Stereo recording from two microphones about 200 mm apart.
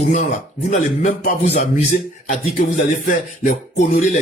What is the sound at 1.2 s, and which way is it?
Speech, 35° left (ahead or behind).